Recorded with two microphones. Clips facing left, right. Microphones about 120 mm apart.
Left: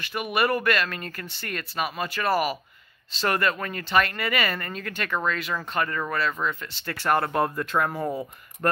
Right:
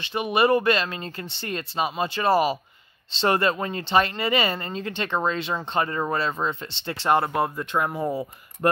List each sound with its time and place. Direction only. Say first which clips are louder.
0.0 s speech: right 4 dB; 25° right (ahead or behind)
7.3 s speech: even; 5° right (ahead or behind)